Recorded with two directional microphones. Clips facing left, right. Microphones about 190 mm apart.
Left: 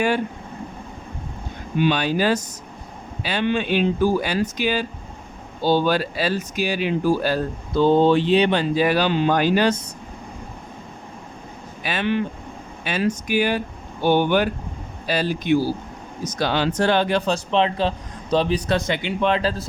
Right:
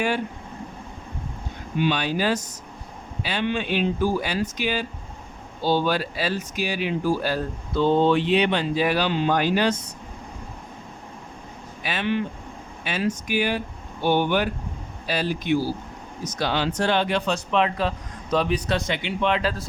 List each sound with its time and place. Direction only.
1.8 s speech: 45° left (ahead or behind)
11.9 s speech: 50° left (ahead or behind)
16.4 s speech: 45° left (ahead or behind)